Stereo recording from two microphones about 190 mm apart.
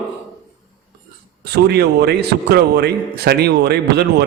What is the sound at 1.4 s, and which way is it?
A man's voice, 55° right (ahead or behind).